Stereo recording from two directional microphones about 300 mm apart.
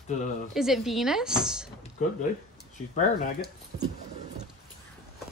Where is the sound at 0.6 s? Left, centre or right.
Centre.